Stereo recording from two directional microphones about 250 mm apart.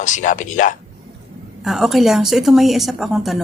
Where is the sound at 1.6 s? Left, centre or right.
Centre.